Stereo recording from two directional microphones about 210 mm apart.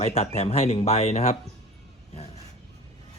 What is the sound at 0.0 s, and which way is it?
Speech, 30° left (ahead or behind).